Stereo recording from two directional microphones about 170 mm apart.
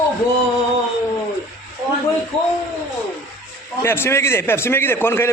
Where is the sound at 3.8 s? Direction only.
15° left (ahead or behind).